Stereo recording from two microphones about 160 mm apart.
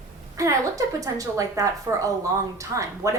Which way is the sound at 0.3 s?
20° right (ahead or behind).